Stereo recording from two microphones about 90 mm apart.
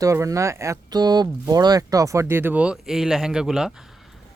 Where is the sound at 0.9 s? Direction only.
50° right (ahead or behind); by 3.7 s 5° right (ahead or behind).